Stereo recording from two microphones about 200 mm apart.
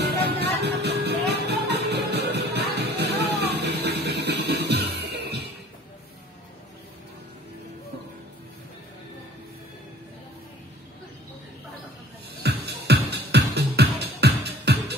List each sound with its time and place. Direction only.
0.0 s music: 55° right (ahead or behind)
12.4 s music: 55° right (ahead or behind)